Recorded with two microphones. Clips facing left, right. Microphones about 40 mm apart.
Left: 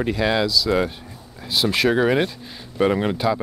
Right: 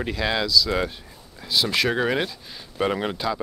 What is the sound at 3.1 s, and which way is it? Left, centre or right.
Speech, centre.